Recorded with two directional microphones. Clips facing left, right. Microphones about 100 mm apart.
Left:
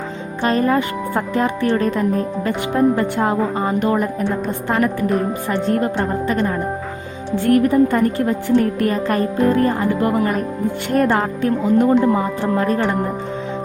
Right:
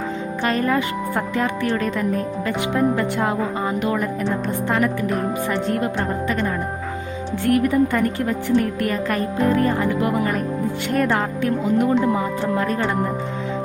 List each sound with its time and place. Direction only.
0.4 s a woman's voice: 30° left (ahead or behind)
7.5 s a woman's voice: 35° left (ahead or behind)
10.9 s a woman's voice: 35° left (ahead or behind)